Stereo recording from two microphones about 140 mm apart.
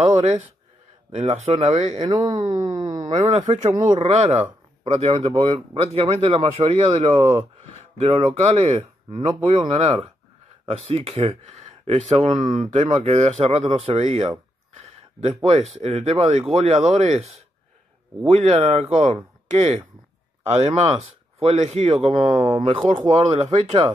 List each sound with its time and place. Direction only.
0.0 s speech: 50° right (ahead or behind)
2.0 s speech: 30° right (ahead or behind)
2.3 s speech: 60° right (ahead or behind)
3.0 s speech: 50° right (ahead or behind)
19.4 s a sound: 55° right (ahead or behind)
20.4 s speech: 45° right (ahead or behind)